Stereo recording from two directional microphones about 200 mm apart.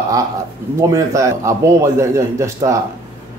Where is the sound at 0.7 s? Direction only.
15° right (ahead or behind).